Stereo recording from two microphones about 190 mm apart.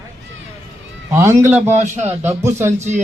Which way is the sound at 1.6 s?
40° right (ahead or behind).